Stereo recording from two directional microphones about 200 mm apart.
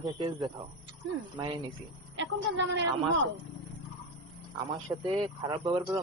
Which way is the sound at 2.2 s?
65° right (ahead or behind).